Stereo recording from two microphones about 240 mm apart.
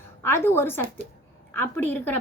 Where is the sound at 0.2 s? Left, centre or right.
Centre.